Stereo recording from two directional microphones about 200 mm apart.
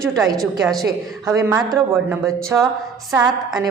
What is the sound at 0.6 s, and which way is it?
Speech, centre (ahead or behind).